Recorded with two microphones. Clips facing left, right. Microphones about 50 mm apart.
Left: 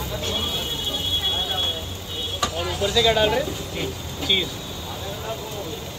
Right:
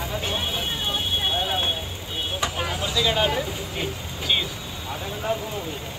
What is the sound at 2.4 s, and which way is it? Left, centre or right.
Vehicle, right.